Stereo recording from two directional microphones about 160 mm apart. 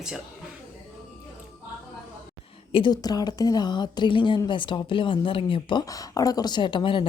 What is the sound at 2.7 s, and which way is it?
A woman's voice, 30° left (ahead or behind).